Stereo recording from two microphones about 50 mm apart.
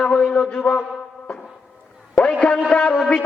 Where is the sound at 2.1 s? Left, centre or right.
Left.